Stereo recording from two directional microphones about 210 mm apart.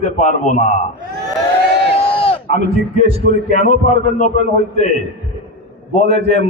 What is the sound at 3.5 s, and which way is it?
A man's voice, 35° left (ahead or behind).